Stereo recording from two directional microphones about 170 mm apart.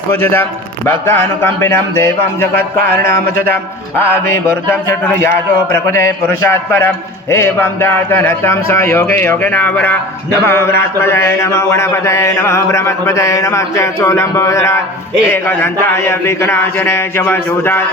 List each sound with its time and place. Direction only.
0.1 s mantra: 10° left (ahead or behind)